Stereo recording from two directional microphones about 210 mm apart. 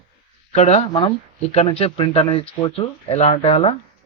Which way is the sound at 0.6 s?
30° left (ahead or behind).